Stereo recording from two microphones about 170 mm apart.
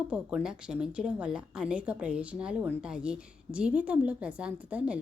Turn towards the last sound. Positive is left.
turn(degrees=-5)  # may be behind; listen again after turning